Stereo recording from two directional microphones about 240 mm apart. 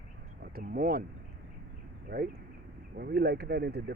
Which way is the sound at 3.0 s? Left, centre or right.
Right.